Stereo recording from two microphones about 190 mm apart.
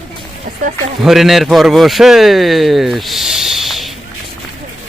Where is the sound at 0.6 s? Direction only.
45° right (ahead or behind).